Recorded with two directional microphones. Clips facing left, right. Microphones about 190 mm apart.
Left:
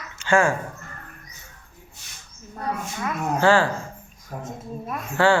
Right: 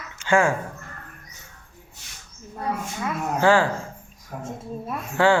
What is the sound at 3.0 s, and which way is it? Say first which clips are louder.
Speech: even; 15° right (ahead or behind).